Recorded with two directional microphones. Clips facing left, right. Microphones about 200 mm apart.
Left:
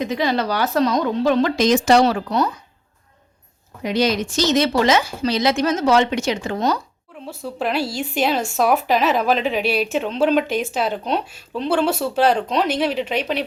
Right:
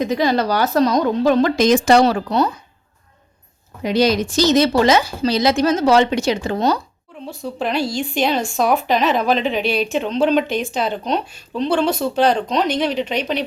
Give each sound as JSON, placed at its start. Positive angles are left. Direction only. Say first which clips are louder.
{"t": 0.0, "sound": "speech", "louder": "right 3 dB", "side_deg": -40}
{"t": 3.8, "sound": "speech", "louder": "right 3 dB", "side_deg": -35}
{"t": 7.3, "sound": "a woman's voice", "louder": "right 1 dB", "side_deg": 5}